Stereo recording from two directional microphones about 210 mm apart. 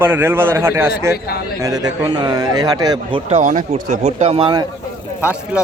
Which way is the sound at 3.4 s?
35° right (ahead or behind).